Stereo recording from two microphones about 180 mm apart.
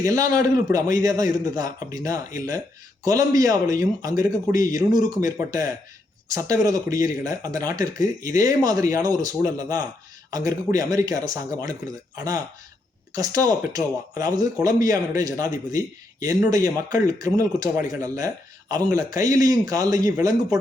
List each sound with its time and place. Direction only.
0.0 s speech: 20° right (ahead or behind)